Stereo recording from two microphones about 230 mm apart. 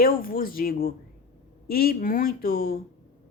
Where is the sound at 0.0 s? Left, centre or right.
Left.